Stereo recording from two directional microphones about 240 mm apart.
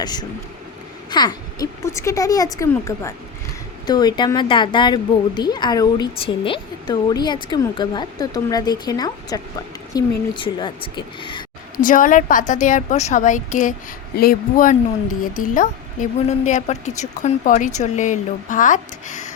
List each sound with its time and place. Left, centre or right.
0.0 s a woman's voice: centre
11.8 s a woman's voice: left